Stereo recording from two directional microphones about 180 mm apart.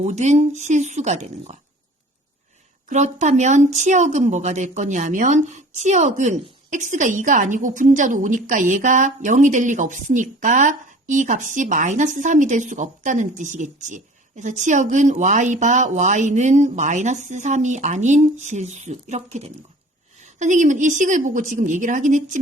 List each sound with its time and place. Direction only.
0.0 s speech: 40° right (ahead or behind)
2.9 s speech: 40° right (ahead or behind)